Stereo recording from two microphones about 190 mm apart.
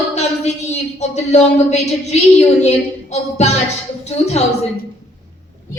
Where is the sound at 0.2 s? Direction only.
35° left (ahead or behind).